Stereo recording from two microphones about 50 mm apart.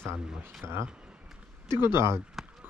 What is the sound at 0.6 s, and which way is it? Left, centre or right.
Speech, right.